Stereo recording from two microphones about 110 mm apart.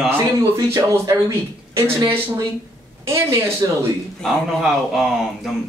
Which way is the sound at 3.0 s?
25° right (ahead or behind).